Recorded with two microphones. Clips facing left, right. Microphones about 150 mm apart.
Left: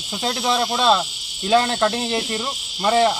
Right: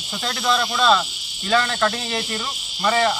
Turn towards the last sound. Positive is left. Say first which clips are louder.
# left 3 dB
turn(degrees=25)  # may be behind; listen again after turning